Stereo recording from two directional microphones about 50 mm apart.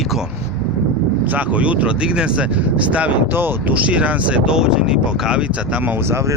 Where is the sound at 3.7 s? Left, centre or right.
Right.